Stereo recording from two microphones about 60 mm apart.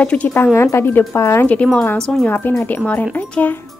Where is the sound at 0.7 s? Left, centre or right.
Left.